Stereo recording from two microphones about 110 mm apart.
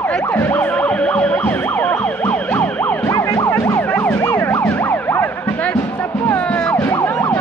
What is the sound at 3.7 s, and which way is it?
Emergency vehicle, 15° left (ahead or behind).